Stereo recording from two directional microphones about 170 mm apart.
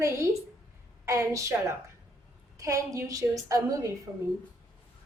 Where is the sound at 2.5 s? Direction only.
20° right (ahead or behind).